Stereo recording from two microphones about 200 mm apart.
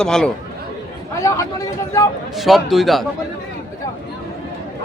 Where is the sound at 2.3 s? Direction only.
Centre (ahead or behind).